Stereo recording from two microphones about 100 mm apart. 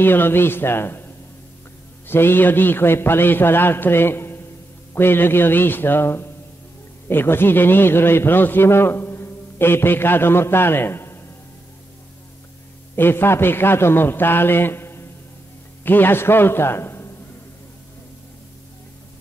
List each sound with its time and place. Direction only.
0.0 s a man's voice: 20° left (ahead or behind)
12.9 s a man's voice: 20° left (ahead or behind)